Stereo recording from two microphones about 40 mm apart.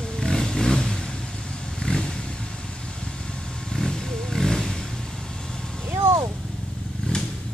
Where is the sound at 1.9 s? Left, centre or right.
Left.